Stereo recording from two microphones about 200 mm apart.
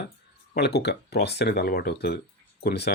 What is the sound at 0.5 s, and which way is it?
Speech, 55° left (ahead or behind).